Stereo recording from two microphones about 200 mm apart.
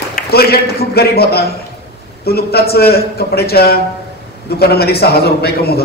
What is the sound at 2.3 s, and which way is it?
A man's voice, 50° left (ahead or behind).